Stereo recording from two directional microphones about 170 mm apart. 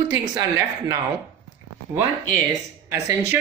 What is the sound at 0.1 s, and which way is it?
Speech, 15° right (ahead or behind).